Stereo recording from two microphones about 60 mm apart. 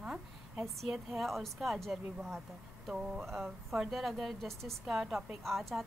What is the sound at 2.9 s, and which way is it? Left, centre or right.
Speech, centre.